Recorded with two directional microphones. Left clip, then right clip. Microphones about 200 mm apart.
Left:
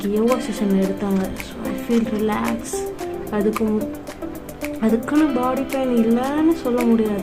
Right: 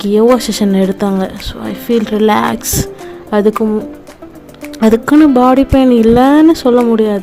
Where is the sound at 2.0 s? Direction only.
50° right (ahead or behind).